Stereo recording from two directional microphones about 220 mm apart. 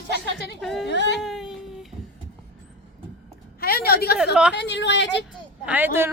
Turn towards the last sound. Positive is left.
turn(degrees=-10)  # may be behind; listen again after turning